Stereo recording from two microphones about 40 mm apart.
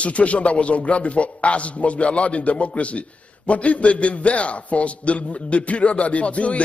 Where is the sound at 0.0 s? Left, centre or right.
Left.